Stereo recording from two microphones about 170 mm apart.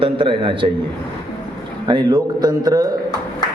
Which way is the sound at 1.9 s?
25° right (ahead or behind).